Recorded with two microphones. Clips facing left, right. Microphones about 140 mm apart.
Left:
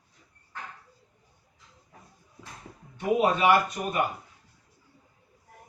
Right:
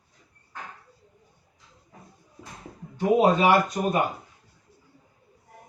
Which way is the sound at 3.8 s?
35° right (ahead or behind).